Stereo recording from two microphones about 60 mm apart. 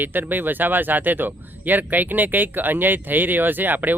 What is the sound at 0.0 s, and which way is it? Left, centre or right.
Speech, right.